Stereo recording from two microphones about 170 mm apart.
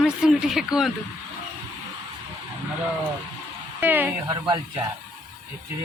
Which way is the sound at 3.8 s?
10° right (ahead or behind).